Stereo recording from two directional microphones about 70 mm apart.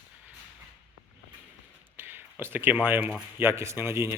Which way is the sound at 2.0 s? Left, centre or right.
Right.